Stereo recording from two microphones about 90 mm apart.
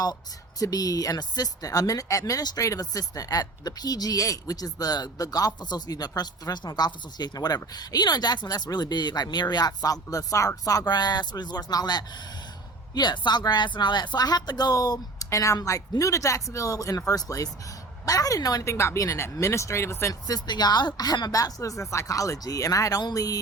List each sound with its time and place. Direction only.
0.6 s speech: 45° left (ahead or behind)
20.2 s speech: 45° left (ahead or behind)